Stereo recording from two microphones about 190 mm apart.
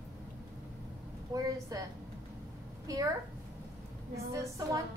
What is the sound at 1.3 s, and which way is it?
Speech, 20° right (ahead or behind).